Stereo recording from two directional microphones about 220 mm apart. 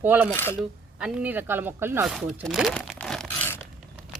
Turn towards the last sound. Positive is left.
turn(degrees=10)  # may be behind; listen again after turning